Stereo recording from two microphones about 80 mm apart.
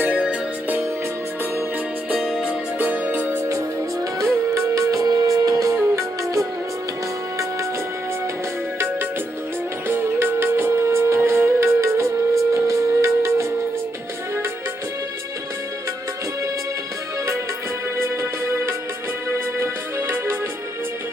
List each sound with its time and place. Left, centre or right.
0.0 s music: centre
2.1 s music: centre
2.8 s music: centre
4.5 s music: right
9.8 s music: right
17.9 s music: right